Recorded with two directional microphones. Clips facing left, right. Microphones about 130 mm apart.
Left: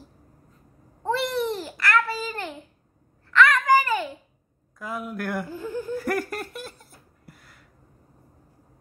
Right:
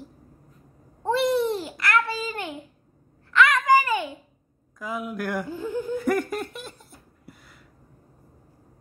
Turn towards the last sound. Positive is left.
turn(degrees=0)  # may be behind; listen again after turning